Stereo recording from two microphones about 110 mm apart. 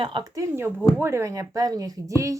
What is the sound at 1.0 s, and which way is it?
Speech, 25° right (ahead or behind).